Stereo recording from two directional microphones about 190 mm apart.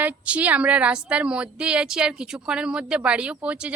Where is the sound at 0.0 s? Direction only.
5° right (ahead or behind).